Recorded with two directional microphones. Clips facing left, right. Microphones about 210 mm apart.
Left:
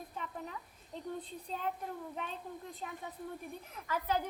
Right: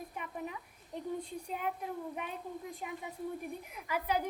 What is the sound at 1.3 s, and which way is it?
Speech, 10° right (ahead or behind).